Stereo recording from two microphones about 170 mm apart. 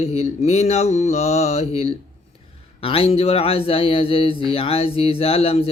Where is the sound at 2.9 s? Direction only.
35° left (ahead or behind).